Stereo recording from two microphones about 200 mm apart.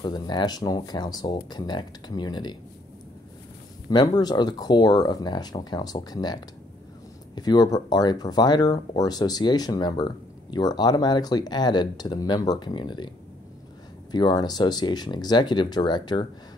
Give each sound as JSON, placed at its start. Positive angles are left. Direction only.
{"t": 0.0, "sound": "speech", "side_deg": 20}
{"t": 3.9, "sound": "speech", "side_deg": 20}
{"t": 14.1, "sound": "speech", "side_deg": 20}